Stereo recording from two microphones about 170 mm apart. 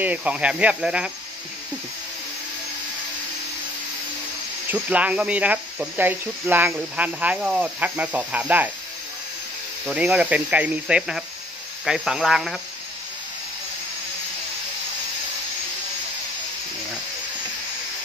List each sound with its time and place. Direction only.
0.0 s speech: 10° right (ahead or behind)
4.6 s speech: 10° right (ahead or behind)
9.8 s speech: 5° right (ahead or behind)